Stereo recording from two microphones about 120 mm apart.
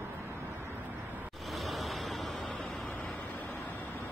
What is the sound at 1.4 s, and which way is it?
Vehicle, centre (ahead or behind).